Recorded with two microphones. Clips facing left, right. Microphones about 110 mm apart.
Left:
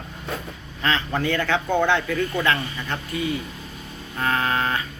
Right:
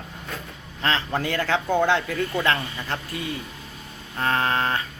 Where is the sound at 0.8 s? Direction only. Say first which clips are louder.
Left 1 dB; 35° right (ahead or behind).